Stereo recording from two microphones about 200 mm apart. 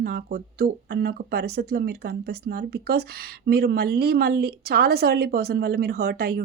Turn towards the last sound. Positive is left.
turn(degrees=-50)  # may be behind; listen again after turning